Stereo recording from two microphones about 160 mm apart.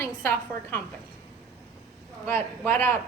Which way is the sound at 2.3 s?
15° left (ahead or behind).